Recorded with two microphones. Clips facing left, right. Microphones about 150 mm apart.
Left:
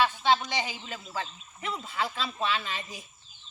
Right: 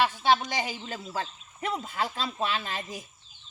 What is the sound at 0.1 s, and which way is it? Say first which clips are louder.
Speech: right 1 dB; 40° right (ahead or behind).